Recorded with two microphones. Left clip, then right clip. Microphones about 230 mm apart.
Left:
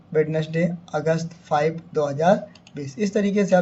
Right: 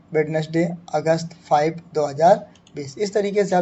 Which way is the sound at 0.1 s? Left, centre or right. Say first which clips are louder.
Right 1 dB; right.